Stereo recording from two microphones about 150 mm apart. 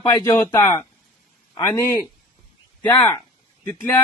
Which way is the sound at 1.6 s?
15° left (ahead or behind).